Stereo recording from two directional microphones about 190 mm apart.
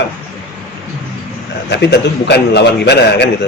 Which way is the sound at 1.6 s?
60° left (ahead or behind).